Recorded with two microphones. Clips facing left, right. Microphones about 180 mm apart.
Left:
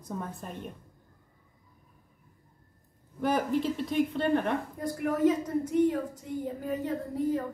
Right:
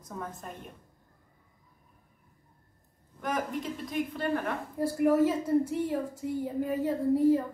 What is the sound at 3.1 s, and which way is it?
Speech, 30° left (ahead or behind).